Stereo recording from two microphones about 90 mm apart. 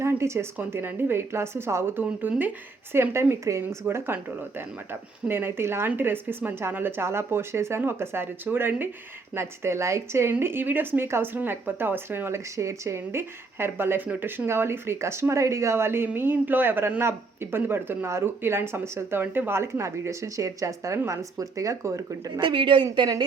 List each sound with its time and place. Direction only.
0.0 s speech: 30° right (ahead or behind)
22.4 s speech: 60° right (ahead or behind)